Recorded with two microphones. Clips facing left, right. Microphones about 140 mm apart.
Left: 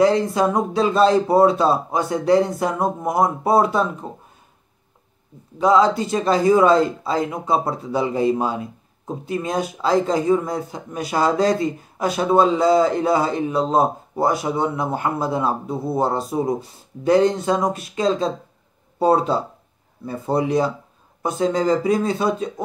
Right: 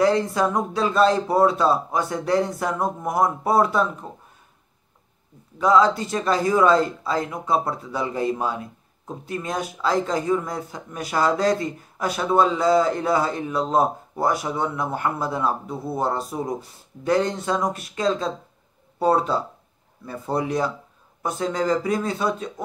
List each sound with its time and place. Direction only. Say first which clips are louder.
0.0 s speech: left 3 dB; 20° left (ahead or behind)
5.6 s speech: left 2 dB; 25° left (ahead or behind)